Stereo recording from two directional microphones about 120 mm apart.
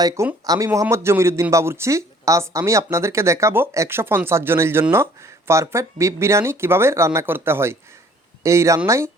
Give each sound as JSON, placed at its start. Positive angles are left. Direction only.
{"t": 0.0, "sound": "speech", "side_deg": -25}